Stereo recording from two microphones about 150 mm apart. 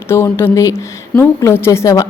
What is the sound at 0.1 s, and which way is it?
Speech, 15° left (ahead or behind).